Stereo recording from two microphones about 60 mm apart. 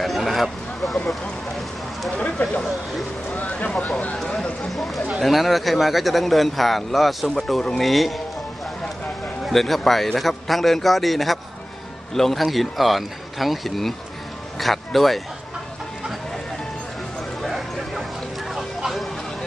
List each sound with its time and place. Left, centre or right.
0.0 s vehicle: centre
0.9 s speech: centre
2.1 s a sound: left
4.6 s speech: centre
9.5 s speech: centre
17.4 s bow-wow: centre
18.5 s vehicle: centre